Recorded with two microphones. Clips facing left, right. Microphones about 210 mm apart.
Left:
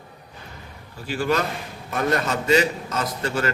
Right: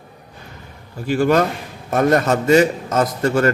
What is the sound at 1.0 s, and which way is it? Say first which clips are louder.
A man's voice: right 8 dB; 50° right (ahead or behind).